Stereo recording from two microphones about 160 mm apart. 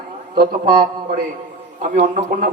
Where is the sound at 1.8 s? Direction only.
50° right (ahead or behind).